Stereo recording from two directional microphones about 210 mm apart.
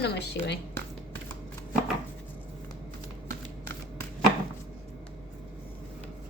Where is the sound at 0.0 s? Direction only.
55° left (ahead or behind).